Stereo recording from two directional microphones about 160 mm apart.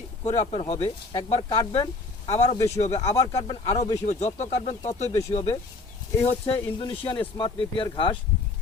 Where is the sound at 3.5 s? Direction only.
35° left (ahead or behind).